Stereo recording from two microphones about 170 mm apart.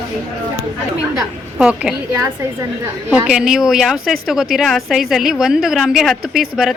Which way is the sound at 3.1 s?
5° right (ahead or behind).